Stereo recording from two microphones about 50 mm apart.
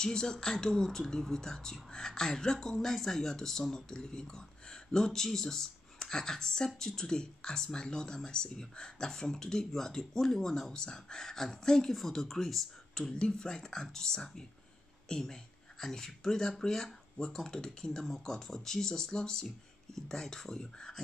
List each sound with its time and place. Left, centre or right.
0.0 s speech: centre
13.1 s a woman's voice: centre
18.0 s speech: centre